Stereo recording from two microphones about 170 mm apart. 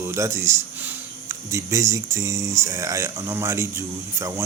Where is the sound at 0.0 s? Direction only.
15° right (ahead or behind).